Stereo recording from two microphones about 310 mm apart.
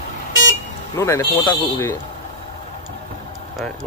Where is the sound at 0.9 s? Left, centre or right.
Centre.